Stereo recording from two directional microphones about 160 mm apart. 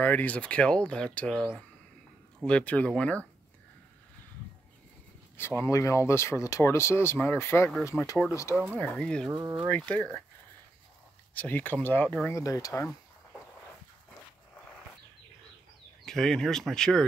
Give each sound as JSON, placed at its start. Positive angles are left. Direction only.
{"t": 0.0, "sound": "speech", "side_deg": 10}
{"t": 5.4, "sound": "speech", "side_deg": 15}
{"t": 8.7, "sound": "speech", "side_deg": 5}
{"t": 9.3, "sound": "speech", "side_deg": -25}
{"t": 9.7, "sound": "speech", "side_deg": 10}
{"t": 11.3, "sound": "speech", "side_deg": 10}
{"t": 16.1, "sound": "speech", "side_deg": 5}